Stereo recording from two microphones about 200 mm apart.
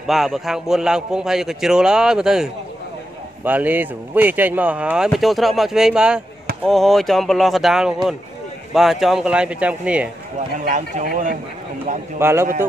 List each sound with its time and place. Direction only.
0.0 s speech: centre (ahead or behind)
10.6 s speech: 40° right (ahead or behind)
12.2 s a man's voice: 10° right (ahead or behind)